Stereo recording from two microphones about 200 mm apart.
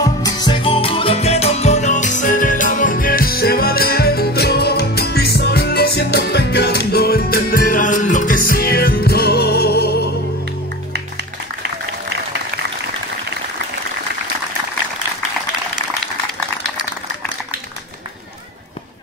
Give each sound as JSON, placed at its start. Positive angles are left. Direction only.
{"t": 0.0, "sound": "music", "side_deg": 20}